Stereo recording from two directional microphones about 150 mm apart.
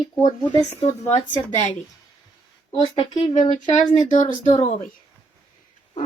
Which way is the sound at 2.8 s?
35° left (ahead or behind).